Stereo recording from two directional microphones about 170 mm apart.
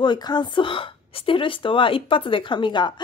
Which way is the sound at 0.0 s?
25° left (ahead or behind).